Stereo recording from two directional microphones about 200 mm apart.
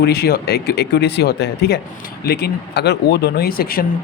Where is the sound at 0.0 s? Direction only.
50° left (ahead or behind).